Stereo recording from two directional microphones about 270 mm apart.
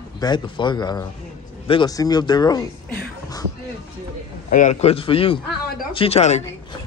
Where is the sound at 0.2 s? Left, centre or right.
Centre.